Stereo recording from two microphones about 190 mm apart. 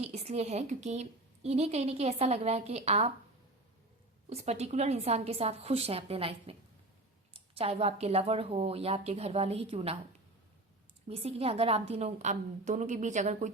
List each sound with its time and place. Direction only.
0.0 s a woman's voice: 35° right (ahead or behind)
4.3 s a woman's voice: 35° right (ahead or behind)
11.1 s a woman's voice: 30° right (ahead or behind)